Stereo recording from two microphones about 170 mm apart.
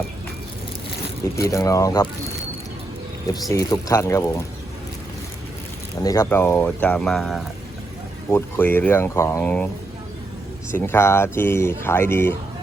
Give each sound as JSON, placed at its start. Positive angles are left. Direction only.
{"t": 1.2, "sound": "speech", "side_deg": 20}
{"t": 3.5, "sound": "speech", "side_deg": 20}
{"t": 6.0, "sound": "speech", "side_deg": 20}
{"t": 8.3, "sound": "speech", "side_deg": 15}
{"t": 10.7, "sound": "speech", "side_deg": 15}